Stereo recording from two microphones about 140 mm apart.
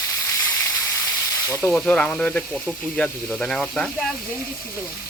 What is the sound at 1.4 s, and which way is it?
Speech, 15° left (ahead or behind).